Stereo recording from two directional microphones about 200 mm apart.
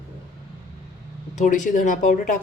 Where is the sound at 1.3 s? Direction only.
40° left (ahead or behind).